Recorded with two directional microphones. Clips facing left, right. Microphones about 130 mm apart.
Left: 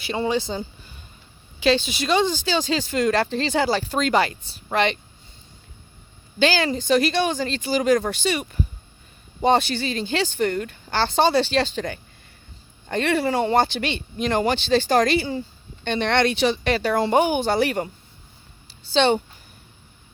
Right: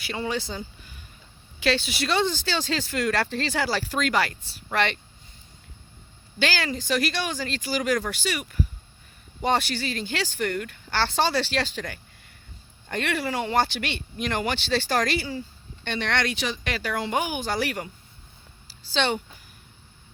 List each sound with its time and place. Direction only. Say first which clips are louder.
0.0 s speech: left 6 dB; 25° left (ahead or behind)
6.4 s speech: left 6 dB; 20° left (ahead or behind)
18.9 s speech: left 7 dB; 25° left (ahead or behind)